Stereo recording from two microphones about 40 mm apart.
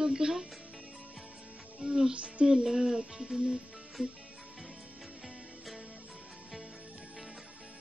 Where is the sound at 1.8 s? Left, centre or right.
Centre.